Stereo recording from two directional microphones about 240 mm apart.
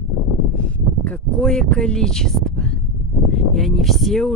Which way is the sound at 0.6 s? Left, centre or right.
Centre.